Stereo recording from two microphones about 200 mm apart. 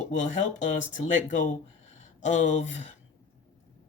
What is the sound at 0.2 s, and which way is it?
Speech, 35° left (ahead or behind).